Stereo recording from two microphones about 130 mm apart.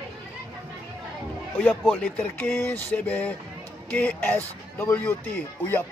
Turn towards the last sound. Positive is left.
turn(degrees=15)  # may be behind; listen again after turning